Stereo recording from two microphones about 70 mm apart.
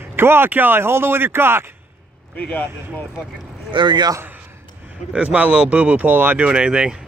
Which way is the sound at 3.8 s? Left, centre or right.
Right.